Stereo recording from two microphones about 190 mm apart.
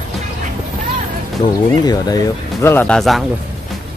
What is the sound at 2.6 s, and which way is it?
Speech, 10° left (ahead or behind).